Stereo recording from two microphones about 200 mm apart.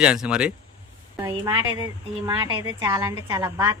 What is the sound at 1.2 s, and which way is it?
A woman's voice, 15° right (ahead or behind).